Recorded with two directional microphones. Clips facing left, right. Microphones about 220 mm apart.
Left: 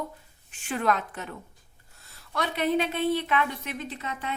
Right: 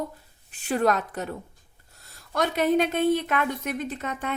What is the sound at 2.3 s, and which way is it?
A woman's voice, 45° right (ahead or behind).